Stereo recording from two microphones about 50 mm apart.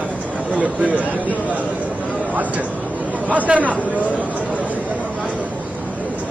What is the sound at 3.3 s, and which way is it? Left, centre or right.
Speech, right.